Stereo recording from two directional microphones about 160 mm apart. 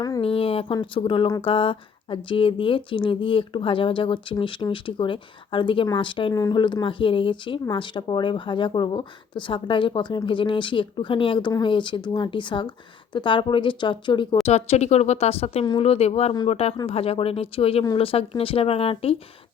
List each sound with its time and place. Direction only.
0.2 s speech: 35° left (ahead or behind)
14.4 s speech: 40° left (ahead or behind)